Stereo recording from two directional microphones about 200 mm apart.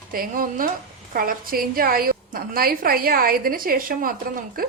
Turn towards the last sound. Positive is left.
turn(degrees=-45)  # may be behind; listen again after turning